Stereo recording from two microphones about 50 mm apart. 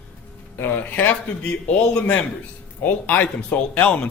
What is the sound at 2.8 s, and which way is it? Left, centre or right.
Speech, left.